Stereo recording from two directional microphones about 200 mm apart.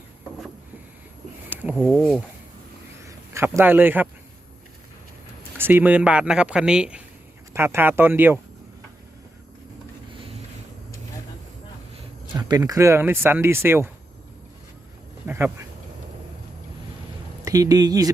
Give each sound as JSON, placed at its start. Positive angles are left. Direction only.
{"t": 1.5, "sound": "a sound", "side_deg": -10}
{"t": 1.7, "sound": "speech", "side_deg": 5}
{"t": 3.0, "sound": "speech", "side_deg": -15}
{"t": 5.5, "sound": "speech", "side_deg": -10}
{"t": 12.4, "sound": "speech", "side_deg": -20}
{"t": 15.3, "sound": "speech", "side_deg": -10}
{"t": 17.4, "sound": "speech", "side_deg": -15}